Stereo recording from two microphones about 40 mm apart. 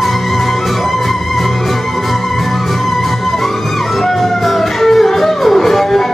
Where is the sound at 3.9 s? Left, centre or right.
Centre.